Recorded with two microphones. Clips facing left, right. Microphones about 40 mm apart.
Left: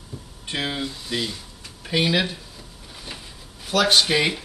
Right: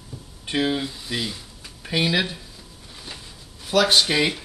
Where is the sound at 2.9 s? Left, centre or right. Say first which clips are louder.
Left 1 dB; centre.